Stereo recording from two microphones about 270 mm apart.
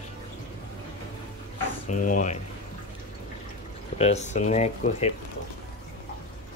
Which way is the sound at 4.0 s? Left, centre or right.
Left.